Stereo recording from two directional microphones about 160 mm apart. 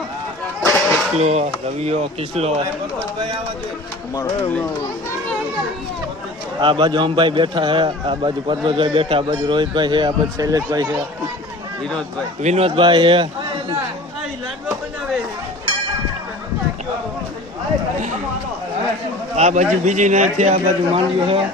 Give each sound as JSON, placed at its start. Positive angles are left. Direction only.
{"t": 0.6, "sound": "a sound", "side_deg": 15}
{"t": 1.2, "sound": "speech", "side_deg": -45}
{"t": 4.1, "sound": "speech", "side_deg": 20}
{"t": 6.6, "sound": "a man's voice", "side_deg": -30}
{"t": 12.4, "sound": "a man's voice", "side_deg": -45}
{"t": 19.4, "sound": "a man's voice", "side_deg": -45}